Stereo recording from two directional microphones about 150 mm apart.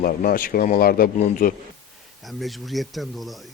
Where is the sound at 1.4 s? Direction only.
65° left (ahead or behind).